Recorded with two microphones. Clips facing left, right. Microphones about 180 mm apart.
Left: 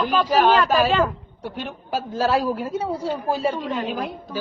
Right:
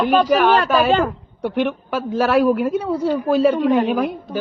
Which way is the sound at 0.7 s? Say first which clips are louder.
Right 3 dB; 60° right (ahead or behind).